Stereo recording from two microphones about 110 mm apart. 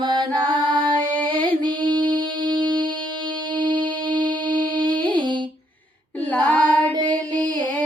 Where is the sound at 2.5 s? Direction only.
45° right (ahead or behind).